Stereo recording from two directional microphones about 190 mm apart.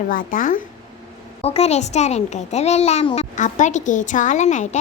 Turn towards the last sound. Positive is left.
turn(degrees=40)  # may be behind; listen again after turning